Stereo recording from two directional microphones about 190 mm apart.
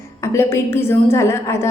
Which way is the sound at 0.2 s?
15° left (ahead or behind).